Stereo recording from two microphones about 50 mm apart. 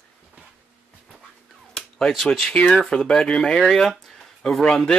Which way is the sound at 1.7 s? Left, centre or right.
Centre.